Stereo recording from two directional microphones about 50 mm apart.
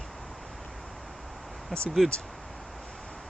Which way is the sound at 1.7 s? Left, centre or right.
Centre.